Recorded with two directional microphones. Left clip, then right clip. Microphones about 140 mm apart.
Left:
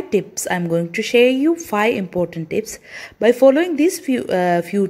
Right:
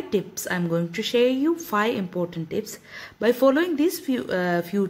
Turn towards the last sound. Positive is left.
turn(degrees=25)  # may be behind; listen again after turning